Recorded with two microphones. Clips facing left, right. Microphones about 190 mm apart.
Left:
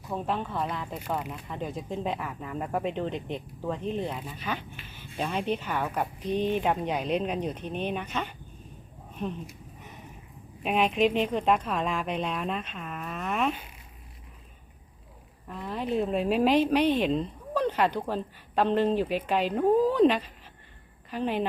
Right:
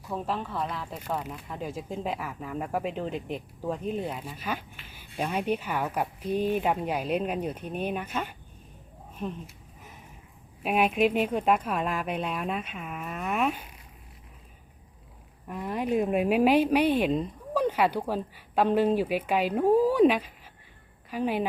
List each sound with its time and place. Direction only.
0.1 s speech: centre (ahead or behind)
10.6 s speech: 5° right (ahead or behind)
15.4 s speech: 10° right (ahead or behind)